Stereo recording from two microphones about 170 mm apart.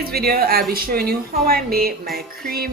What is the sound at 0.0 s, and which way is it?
A woman's voice, 65° right (ahead or behind).